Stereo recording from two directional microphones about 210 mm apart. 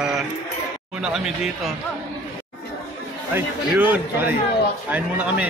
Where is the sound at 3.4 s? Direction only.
10° right (ahead or behind).